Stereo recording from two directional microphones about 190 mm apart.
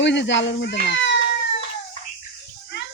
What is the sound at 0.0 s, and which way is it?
Speech, 70° left (ahead or behind).